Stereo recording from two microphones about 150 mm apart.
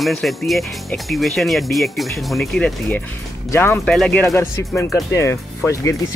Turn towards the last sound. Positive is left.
turn(degrees=20)  # may be behind; listen again after turning